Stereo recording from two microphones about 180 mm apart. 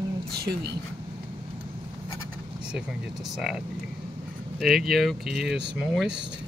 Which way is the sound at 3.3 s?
Centre (ahead or behind).